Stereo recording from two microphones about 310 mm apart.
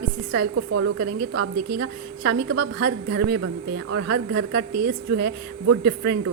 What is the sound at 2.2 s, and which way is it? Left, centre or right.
Speech, right.